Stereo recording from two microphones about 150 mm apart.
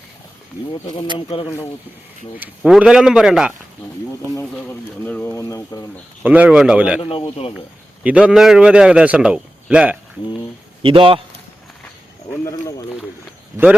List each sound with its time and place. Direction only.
0.7 s speech: 25° left (ahead or behind)
2.4 s a man's voice: 5° right (ahead or behind)
5.0 s speech: 15° left (ahead or behind)
6.2 s a man's voice: 10° right (ahead or behind)
7.0 s speech: 30° left (ahead or behind)
8.0 s a man's voice: 10° right (ahead or behind)
10.8 s a man's voice: 35° right (ahead or behind)